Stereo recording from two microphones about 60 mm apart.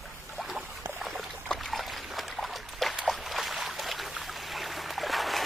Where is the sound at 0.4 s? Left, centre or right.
Centre.